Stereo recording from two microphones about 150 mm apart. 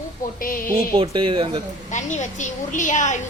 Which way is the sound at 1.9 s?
55° left (ahead or behind).